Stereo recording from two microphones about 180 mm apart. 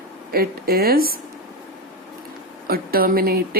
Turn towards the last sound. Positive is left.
turn(degrees=-55)  # may be behind; listen again after turning